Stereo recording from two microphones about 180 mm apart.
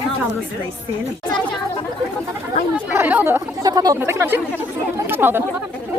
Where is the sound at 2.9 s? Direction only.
10° right (ahead or behind).